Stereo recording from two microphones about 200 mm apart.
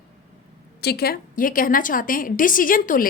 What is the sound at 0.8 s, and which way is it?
A woman's voice, 55° left (ahead or behind).